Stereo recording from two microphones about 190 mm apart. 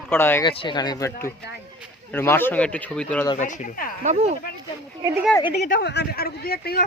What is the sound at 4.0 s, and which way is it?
Speech, 40° right (ahead or behind).